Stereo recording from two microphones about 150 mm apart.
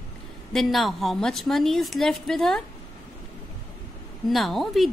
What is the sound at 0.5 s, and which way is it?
A woman's voice, centre (ahead or behind).